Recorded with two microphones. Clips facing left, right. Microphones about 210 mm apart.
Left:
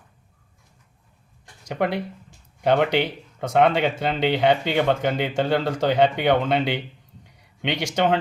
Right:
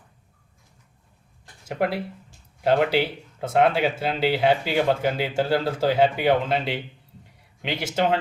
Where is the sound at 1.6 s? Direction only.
5° right (ahead or behind).